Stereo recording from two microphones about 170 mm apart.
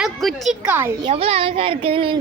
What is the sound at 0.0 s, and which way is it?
Speech, centre (ahead or behind).